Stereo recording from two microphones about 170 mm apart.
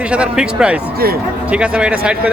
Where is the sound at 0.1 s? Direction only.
5° right (ahead or behind).